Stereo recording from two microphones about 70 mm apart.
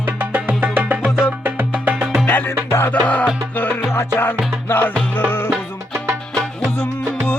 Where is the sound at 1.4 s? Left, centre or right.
Right.